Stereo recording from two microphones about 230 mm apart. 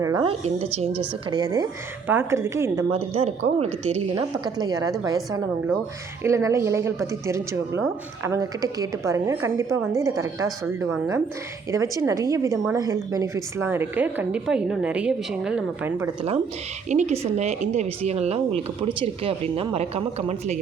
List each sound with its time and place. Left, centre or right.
0.0 s a woman's voice: centre
0.4 s a woman's voice: right; by 2.8 s centre
3.1 s speech: right
4.1 s a woman's voice: centre
16.9 s speech: right